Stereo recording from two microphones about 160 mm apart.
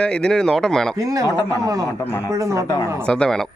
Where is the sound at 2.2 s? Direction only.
20° right (ahead or behind).